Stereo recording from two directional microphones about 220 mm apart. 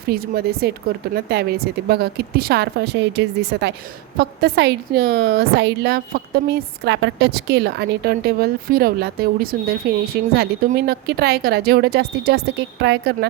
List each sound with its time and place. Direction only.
0.1 s a woman's voice: 45° right (ahead or behind)